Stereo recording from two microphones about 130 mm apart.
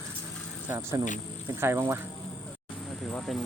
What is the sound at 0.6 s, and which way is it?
Speech, 25° right (ahead or behind).